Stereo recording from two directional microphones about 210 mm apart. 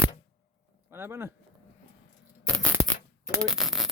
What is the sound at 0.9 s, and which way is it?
Speech, 10° right (ahead or behind).